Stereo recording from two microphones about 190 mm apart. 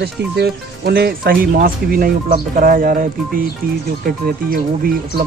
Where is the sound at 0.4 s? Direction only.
60° right (ahead or behind).